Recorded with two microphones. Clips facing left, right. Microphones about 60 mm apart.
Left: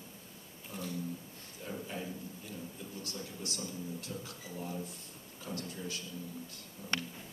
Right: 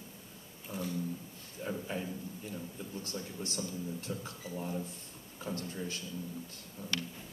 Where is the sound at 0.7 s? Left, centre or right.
Centre.